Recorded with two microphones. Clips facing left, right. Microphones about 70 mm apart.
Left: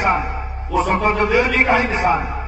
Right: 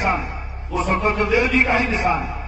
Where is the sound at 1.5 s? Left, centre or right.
Left.